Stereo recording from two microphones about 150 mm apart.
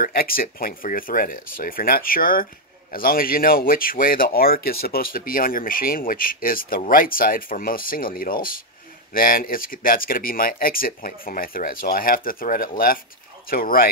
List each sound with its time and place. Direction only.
0.0 s speech: 80° left